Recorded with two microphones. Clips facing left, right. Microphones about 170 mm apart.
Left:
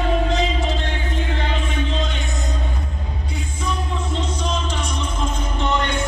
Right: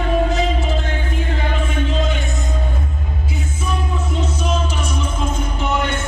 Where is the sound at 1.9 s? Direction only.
5° right (ahead or behind).